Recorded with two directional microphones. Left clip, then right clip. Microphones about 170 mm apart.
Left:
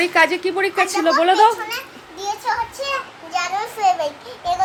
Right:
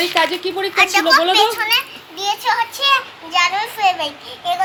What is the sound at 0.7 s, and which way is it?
Speech, 10° right (ahead or behind).